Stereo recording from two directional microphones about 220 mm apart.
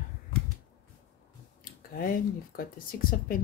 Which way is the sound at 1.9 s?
40° left (ahead or behind).